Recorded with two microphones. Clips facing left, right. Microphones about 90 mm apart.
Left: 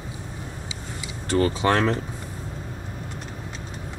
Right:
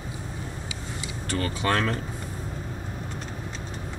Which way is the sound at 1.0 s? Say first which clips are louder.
Left 8 dB; 25° left (ahead or behind).